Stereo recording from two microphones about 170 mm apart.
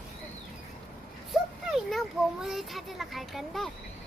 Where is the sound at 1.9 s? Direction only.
Centre (ahead or behind).